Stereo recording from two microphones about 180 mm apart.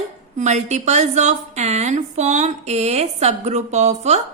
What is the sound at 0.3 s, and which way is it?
A woman's voice, 40° right (ahead or behind).